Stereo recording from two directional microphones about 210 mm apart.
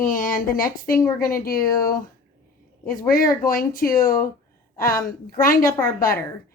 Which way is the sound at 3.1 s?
40° left (ahead or behind).